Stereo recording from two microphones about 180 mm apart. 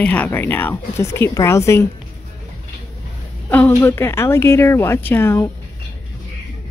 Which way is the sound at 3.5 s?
10° left (ahead or behind).